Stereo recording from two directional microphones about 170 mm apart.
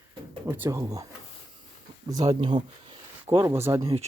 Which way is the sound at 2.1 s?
25° right (ahead or behind).